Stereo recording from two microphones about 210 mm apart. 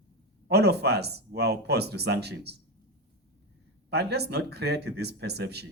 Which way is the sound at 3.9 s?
50° right (ahead or behind).